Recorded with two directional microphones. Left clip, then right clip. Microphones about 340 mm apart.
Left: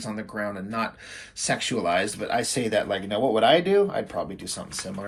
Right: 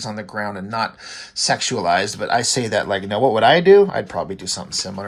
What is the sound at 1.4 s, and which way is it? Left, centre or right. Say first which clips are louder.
Speech: right 6 dB; centre.